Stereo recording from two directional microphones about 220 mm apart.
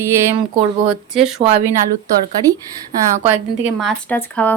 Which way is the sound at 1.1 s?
Centre (ahead or behind).